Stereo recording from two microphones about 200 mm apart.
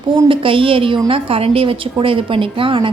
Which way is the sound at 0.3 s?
25° right (ahead or behind).